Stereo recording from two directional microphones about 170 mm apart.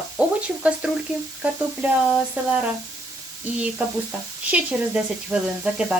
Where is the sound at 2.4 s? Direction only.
10° right (ahead or behind).